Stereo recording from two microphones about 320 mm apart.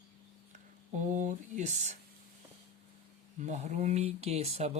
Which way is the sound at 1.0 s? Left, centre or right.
Right.